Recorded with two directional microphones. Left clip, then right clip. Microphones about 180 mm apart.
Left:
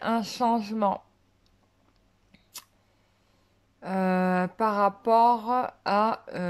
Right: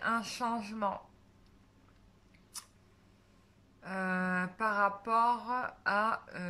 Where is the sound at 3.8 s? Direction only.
35° left (ahead or behind).